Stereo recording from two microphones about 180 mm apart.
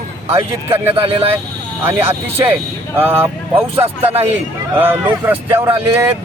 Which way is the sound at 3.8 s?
35° right (ahead or behind).